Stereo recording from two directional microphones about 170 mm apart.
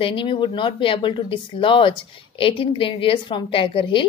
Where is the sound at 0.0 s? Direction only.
30° left (ahead or behind).